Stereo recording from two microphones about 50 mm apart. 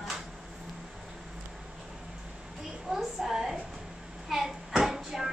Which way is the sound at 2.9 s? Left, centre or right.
Centre.